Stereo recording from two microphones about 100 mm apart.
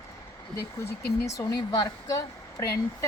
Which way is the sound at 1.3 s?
35° left (ahead or behind).